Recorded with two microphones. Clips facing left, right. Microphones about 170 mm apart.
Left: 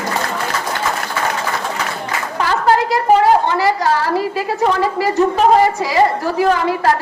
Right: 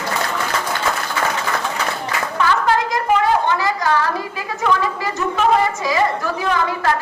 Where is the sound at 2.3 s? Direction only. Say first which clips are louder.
Left 3 dB; 35° left (ahead or behind).